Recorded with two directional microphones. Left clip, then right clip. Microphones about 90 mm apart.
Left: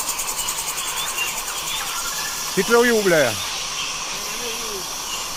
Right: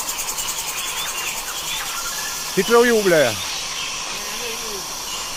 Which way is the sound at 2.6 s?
15° right (ahead or behind).